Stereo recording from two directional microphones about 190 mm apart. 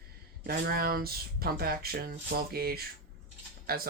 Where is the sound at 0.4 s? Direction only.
50° right (ahead or behind).